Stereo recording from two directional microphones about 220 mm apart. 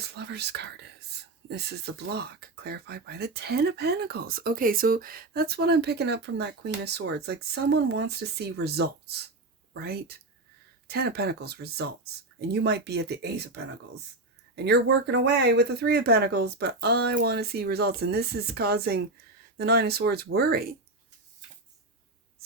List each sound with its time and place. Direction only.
0.1 s speech: 50° right (ahead or behind)